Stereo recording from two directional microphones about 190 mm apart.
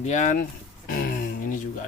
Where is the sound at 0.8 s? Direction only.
45° left (ahead or behind).